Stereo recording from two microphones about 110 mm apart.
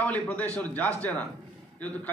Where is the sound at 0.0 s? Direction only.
15° left (ahead or behind).